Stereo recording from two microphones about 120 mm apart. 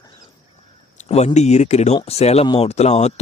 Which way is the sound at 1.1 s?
70° left (ahead or behind).